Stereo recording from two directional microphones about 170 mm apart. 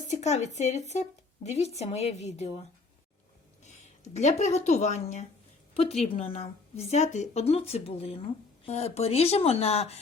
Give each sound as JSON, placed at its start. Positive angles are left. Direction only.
{"t": 0.1, "sound": "speech", "side_deg": 45}
{"t": 3.6, "sound": "speech", "side_deg": 40}